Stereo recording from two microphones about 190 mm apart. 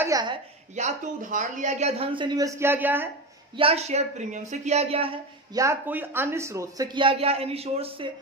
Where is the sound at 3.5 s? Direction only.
30° right (ahead or behind).